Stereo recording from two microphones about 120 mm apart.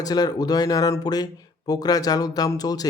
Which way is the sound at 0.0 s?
35° left (ahead or behind).